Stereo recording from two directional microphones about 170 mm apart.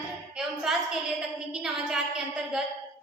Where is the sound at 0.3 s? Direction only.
Centre (ahead or behind).